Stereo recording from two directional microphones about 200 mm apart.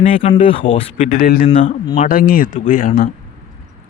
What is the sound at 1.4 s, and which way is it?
Speech, 30° left (ahead or behind).